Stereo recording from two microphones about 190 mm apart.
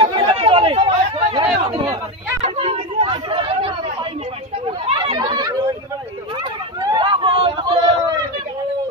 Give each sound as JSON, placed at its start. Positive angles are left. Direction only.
{"t": 0.0, "sound": "chatter", "side_deg": -25}
{"t": 6.8, "sound": "run", "side_deg": -25}